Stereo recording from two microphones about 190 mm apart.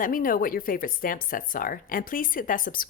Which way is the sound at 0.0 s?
45° left (ahead or behind).